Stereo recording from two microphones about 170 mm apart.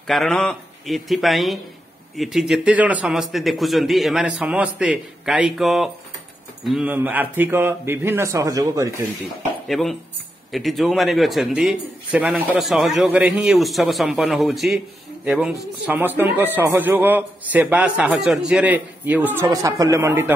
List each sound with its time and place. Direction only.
0.0 s a man's voice: centre (ahead or behind); by 9.0 s 20° right (ahead or behind)
9.7 s a man's voice: centre (ahead or behind); by 20.3 s 15° right (ahead or behind)